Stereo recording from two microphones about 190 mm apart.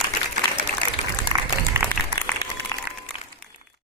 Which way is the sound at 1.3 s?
25° right (ahead or behind).